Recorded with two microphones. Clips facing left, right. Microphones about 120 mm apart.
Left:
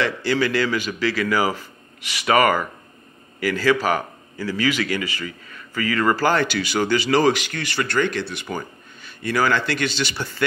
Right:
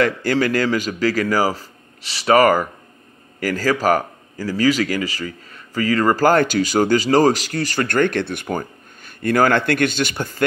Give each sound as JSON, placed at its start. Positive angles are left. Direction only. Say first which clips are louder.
{"t": 0.0, "sound": "a man's voice", "louder": "right 3 dB", "side_deg": -45}